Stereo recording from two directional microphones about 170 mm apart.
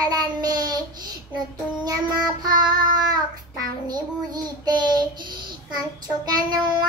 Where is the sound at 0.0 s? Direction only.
25° right (ahead or behind).